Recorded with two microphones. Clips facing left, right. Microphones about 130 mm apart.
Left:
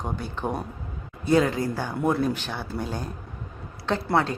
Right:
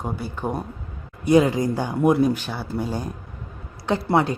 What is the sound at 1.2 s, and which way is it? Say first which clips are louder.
Speech: right 4 dB; 15° right (ahead or behind).